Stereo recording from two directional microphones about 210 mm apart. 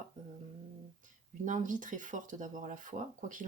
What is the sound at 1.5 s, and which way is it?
Speech, 40° right (ahead or behind).